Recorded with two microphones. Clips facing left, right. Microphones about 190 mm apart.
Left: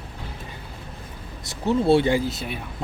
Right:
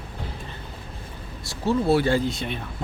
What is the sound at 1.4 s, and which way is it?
Speech, 20° left (ahead or behind).